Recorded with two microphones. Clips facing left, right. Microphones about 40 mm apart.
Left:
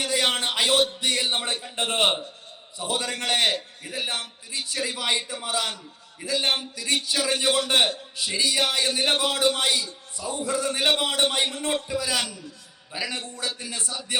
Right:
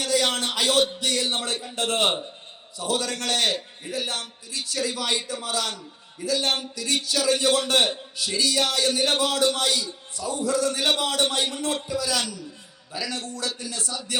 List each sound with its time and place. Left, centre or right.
0.0 s a man's voice: left